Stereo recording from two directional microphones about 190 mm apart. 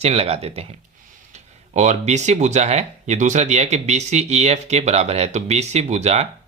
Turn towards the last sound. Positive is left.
turn(degrees=-35)  # may be behind; listen again after turning